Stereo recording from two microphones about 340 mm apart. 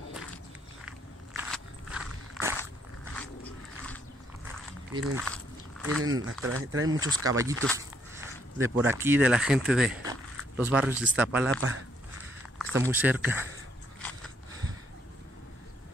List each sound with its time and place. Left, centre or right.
0.8 s walk: centre
3.2 s a sound: centre
5.0 s walk: centre
6.4 s speech: right
7.0 s speech: centre
7.6 s a sound: centre
11.0 s speech: centre